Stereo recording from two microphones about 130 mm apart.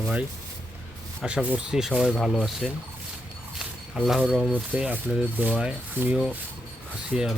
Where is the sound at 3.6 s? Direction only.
5° right (ahead or behind).